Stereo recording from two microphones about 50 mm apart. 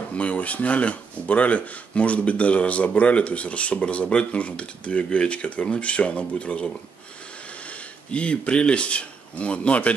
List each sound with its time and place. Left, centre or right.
0.1 s speech: left